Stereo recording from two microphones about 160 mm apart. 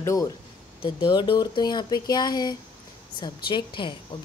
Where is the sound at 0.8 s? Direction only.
30° left (ahead or behind).